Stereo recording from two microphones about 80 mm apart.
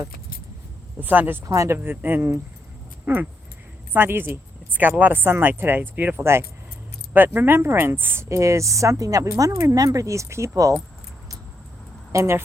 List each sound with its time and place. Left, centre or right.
0.9 s speech: right
1.5 s speech: right
1.8 s speech: right
12.1 s speech: right